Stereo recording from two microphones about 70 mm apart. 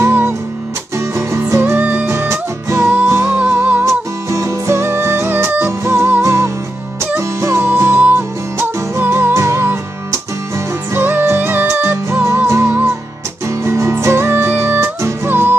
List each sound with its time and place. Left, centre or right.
0.0 s music: right
3.3 s music: right
4.3 s music: right